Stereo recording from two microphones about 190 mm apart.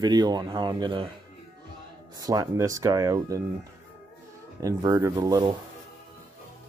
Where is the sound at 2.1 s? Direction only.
20° right (ahead or behind).